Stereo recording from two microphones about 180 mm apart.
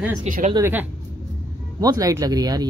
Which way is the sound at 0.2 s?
45° right (ahead or behind).